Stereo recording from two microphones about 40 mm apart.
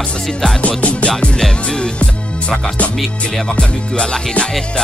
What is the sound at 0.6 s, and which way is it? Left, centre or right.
Music, left.